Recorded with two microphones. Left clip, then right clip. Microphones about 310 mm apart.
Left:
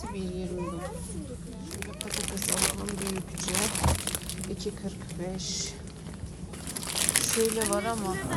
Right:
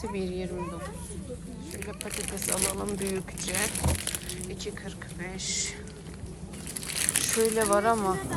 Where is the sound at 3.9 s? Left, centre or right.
Left.